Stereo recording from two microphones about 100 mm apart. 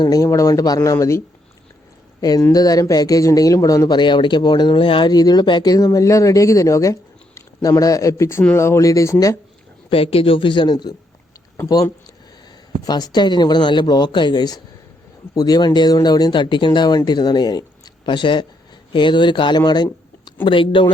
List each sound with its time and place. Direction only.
0.0 s speech: 35° left (ahead or behind)
2.5 s speech: 40° left (ahead or behind); by 5.0 s 60° left (ahead or behind)
5.0 s speech: 40° left (ahead or behind)
9.9 s speech: 70° left (ahead or behind); by 10.9 s 50° left (ahead or behind)
12.8 s speech: 45° left (ahead or behind)